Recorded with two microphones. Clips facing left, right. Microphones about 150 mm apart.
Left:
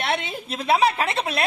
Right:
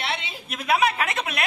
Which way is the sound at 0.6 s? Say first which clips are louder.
Left 2 dB; 30° left (ahead or behind).